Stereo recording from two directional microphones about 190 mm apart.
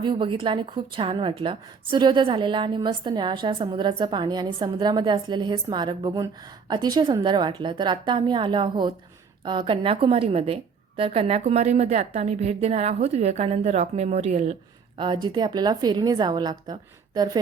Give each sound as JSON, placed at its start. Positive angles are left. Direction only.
{"t": 0.0, "sound": "a woman's voice", "side_deg": -25}
{"t": 14.9, "sound": "a woman's voice", "side_deg": -25}